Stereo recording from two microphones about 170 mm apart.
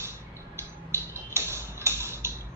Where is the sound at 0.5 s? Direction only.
15° right (ahead or behind).